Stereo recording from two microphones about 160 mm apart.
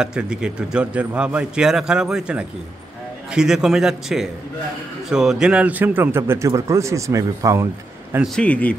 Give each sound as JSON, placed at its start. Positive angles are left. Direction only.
{"t": 0.0, "sound": "a man's voice", "side_deg": -5}
{"t": 8.4, "sound": "speech", "side_deg": 10}